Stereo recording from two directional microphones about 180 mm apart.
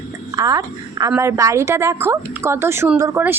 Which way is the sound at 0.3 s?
20° right (ahead or behind).